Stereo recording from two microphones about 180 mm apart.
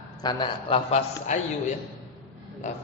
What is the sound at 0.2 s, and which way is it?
A man's voice, 25° left (ahead or behind).